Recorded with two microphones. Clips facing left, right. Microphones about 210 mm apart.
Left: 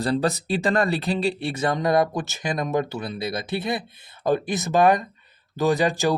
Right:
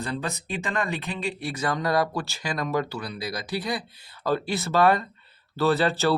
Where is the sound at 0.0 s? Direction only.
35° left (ahead or behind).